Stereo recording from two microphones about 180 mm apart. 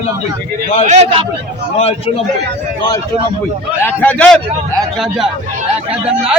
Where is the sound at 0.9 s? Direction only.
35° right (ahead or behind).